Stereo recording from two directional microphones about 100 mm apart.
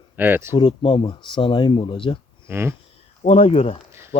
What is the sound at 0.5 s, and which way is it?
Speech, 55° left (ahead or behind).